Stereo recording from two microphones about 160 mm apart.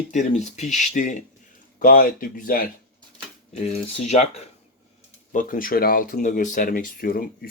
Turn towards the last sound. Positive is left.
turn(degrees=65)  # may be behind; listen again after turning